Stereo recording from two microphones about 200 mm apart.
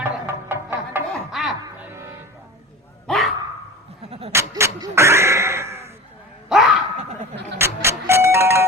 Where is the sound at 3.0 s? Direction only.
Centre (ahead or behind).